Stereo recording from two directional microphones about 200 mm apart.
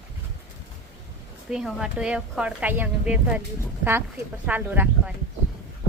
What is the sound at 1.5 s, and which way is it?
A woman's voice, 5° right (ahead or behind).